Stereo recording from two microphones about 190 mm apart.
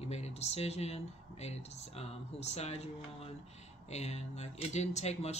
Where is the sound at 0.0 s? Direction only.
35° left (ahead or behind).